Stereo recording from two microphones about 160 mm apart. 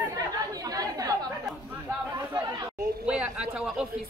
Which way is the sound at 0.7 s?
20° right (ahead or behind).